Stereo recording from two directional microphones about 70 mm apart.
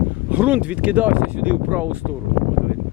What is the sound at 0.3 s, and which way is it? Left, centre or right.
Speech, right.